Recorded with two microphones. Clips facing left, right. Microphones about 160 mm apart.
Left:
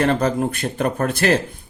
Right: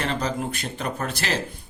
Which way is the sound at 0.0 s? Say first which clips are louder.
Left 8 dB; 50° left (ahead or behind).